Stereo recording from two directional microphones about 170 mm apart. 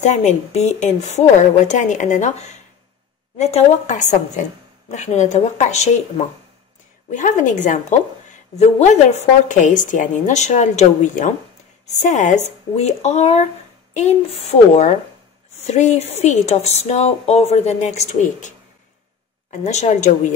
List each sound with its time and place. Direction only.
0.0 s a woman's voice: 40° left (ahead or behind)
19.6 s a woman's voice: 40° left (ahead or behind)